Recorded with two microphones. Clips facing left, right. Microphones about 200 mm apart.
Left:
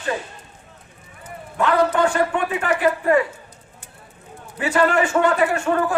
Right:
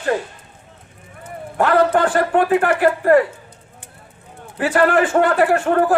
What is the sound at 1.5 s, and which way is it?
A man's voice, 55° right (ahead or behind).